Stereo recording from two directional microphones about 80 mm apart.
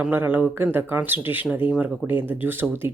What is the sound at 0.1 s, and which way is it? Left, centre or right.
Speech, right.